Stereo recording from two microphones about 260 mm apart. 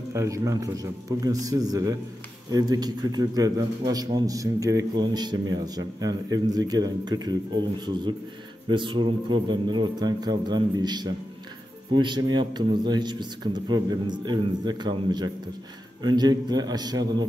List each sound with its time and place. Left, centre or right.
0.1 s a man's voice: centre
8.6 s a man's voice: centre